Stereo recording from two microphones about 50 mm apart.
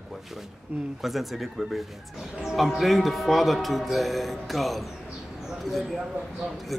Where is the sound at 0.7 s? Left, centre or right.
Right.